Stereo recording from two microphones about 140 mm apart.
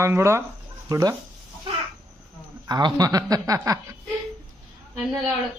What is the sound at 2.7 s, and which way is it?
A man's voice, 30° right (ahead or behind).